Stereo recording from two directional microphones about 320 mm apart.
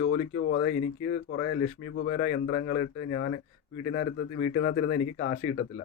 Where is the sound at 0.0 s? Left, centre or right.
Left.